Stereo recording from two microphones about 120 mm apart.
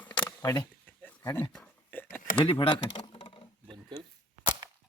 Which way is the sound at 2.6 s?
40° left (ahead or behind).